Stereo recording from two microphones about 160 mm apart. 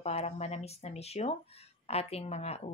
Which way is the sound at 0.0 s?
40° left (ahead or behind).